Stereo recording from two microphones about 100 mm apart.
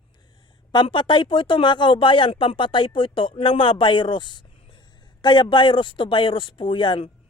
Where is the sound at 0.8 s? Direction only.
55° left (ahead or behind).